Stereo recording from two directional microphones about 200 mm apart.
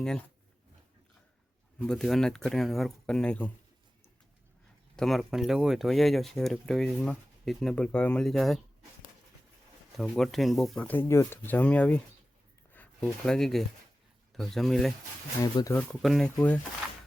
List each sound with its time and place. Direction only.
1.9 s speech: centre (ahead or behind)
4.9 s speech: centre (ahead or behind)
10.0 s speech: centre (ahead or behind)
15.4 s speech: 15° left (ahead or behind)
15.9 s speech: centre (ahead or behind)